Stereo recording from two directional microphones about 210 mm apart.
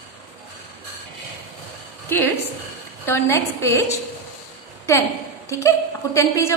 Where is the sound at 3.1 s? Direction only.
10° left (ahead or behind).